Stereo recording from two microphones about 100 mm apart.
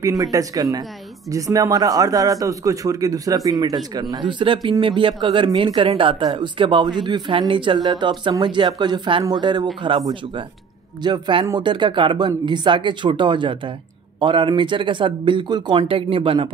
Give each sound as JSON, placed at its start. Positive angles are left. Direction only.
{"t": 0.0, "sound": "a man's voice", "side_deg": -35}
{"t": 11.0, "sound": "speech", "side_deg": -50}